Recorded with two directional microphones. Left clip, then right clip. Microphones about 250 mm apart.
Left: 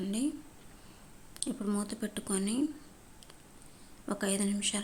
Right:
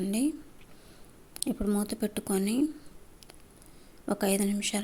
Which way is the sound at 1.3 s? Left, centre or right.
Centre.